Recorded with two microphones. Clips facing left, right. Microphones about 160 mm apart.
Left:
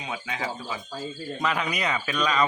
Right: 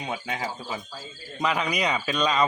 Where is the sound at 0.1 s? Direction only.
35° right (ahead or behind).